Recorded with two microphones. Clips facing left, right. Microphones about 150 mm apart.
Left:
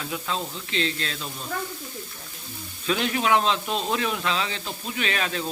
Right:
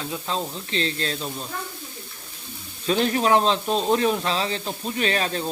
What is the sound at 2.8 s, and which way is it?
Speech, 35° right (ahead or behind).